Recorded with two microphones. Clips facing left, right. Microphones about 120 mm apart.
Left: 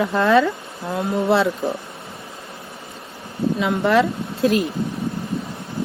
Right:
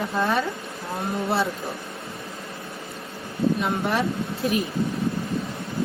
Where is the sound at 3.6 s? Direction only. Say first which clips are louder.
Left 7 dB; 90° left.